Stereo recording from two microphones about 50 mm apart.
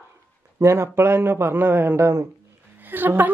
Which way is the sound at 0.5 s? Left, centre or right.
Right.